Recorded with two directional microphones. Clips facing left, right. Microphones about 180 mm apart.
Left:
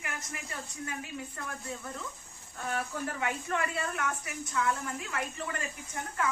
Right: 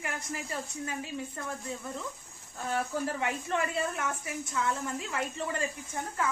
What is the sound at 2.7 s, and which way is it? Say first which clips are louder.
A woman's voice: right 3 dB; 30° right (ahead or behind).